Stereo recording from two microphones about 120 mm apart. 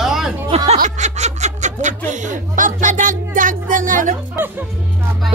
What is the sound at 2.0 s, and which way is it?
Speech, 90° right.